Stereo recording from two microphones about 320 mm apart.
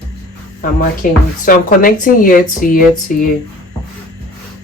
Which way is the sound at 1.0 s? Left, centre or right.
Left.